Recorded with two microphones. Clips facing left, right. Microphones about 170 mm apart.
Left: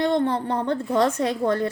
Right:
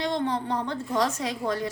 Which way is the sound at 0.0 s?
55° left (ahead or behind).